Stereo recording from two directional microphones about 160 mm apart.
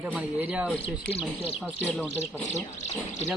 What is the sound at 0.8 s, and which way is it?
Speech, 40° left (ahead or behind).